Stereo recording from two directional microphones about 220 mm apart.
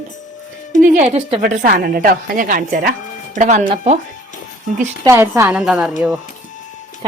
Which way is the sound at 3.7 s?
25° right (ahead or behind).